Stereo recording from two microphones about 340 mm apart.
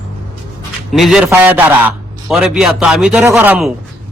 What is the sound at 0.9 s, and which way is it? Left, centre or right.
A man's voice, centre.